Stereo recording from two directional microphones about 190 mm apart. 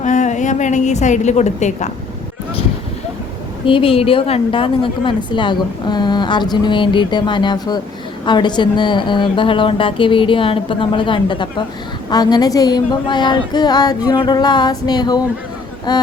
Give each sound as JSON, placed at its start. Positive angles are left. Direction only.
{"t": 0.0, "sound": "a woman's voice", "side_deg": 40}
{"t": 3.7, "sound": "a woman's voice", "side_deg": 30}